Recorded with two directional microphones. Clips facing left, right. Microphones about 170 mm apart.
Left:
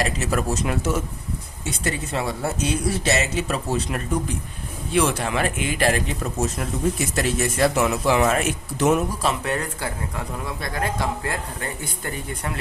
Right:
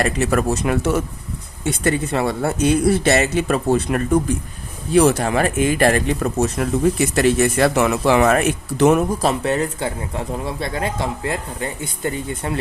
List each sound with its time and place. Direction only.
0.0 s speech: 60° right (ahead or behind)
4.9 s speech: 40° right (ahead or behind); by 9.0 s 55° right (ahead or behind)
9.2 s speech: 25° right (ahead or behind)